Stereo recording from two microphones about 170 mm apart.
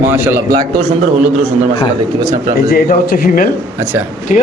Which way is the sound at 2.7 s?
55° left (ahead or behind).